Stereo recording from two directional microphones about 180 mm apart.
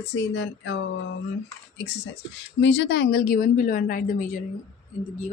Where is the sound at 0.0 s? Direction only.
75° left (ahead or behind).